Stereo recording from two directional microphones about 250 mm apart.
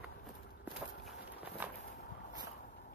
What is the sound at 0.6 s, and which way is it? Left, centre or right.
Walk, centre.